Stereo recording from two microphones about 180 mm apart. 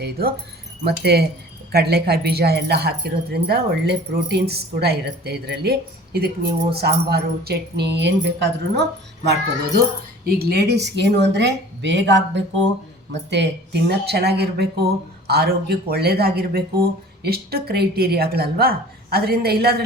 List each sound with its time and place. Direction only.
0.0 s speech: 60° right (ahead or behind); by 12.4 s 80° right
13.3 s speech: 70° right (ahead or behind)